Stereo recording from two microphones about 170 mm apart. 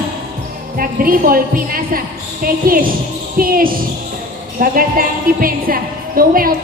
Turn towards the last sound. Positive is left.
turn(degrees=-60)  # may be behind; listen again after turning